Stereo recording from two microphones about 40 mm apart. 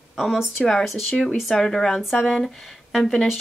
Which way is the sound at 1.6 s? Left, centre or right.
Centre.